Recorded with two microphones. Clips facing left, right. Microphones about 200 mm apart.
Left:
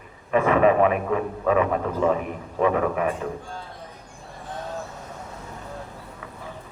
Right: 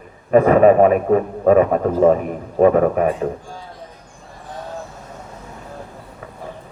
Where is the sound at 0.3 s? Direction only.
40° right (ahead or behind).